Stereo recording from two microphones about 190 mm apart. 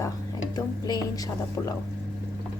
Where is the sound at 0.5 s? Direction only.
20° left (ahead or behind).